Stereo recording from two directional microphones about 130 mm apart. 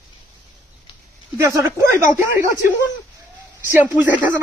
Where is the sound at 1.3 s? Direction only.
20° right (ahead or behind).